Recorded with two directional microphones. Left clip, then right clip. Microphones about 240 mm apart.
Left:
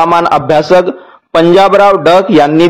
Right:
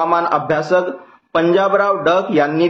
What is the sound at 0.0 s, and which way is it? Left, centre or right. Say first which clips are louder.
A man's voice: left 8 dB; left.